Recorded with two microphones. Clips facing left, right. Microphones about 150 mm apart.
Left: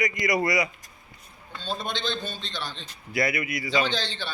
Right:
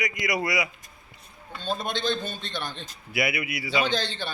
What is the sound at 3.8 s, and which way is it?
Speech, 45° right (ahead or behind).